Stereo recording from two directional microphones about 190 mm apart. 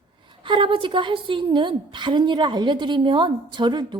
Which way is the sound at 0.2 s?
25° right (ahead or behind).